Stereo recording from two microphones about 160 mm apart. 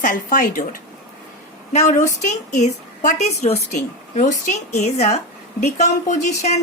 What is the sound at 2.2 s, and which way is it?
Speech, 50° left (ahead or behind).